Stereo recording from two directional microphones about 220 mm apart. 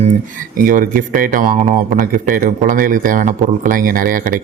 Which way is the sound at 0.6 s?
40° right (ahead or behind).